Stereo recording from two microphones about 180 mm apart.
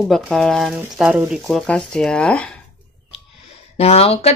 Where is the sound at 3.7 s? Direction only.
35° left (ahead or behind).